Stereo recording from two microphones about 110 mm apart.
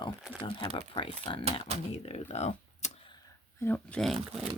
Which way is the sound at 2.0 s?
80° left.